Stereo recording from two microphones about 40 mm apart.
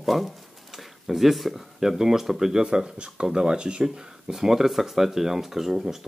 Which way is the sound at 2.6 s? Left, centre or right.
Right.